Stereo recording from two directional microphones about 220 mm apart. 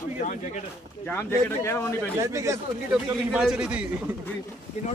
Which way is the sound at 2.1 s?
15° right (ahead or behind).